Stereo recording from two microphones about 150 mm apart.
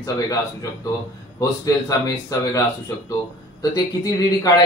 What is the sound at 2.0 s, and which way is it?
Speech, 25° left (ahead or behind).